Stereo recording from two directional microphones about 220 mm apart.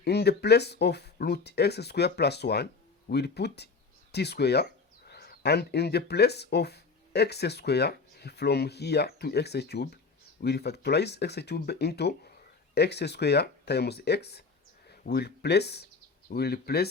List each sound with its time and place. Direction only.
0.0 s speech: 50° left (ahead or behind)